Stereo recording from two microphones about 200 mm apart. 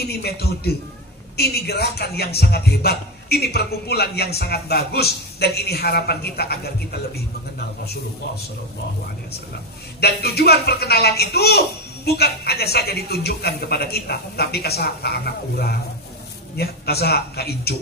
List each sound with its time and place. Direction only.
0.0 s speech: 55° left (ahead or behind)
9.9 s speech: 55° left (ahead or behind)